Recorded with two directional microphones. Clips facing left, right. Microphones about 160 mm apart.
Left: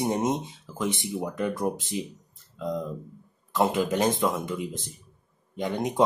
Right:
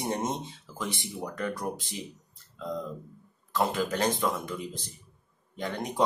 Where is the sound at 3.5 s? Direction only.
20° left (ahead or behind).